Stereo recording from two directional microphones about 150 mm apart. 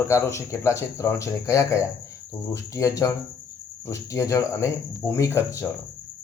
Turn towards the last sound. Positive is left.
turn(degrees=15)  # may be behind; listen again after turning